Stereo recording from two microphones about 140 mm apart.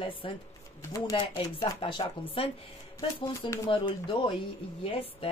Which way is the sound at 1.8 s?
40° left (ahead or behind).